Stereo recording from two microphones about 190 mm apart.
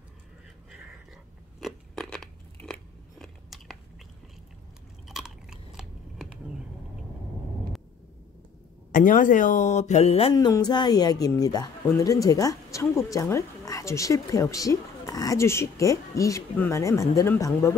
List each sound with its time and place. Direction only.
1.6 s biting: centre (ahead or behind)
5.0 s chewing: 5° right (ahead or behind)
8.9 s speech: 45° left (ahead or behind)
10.3 s a woman's voice: 20° left (ahead or behind)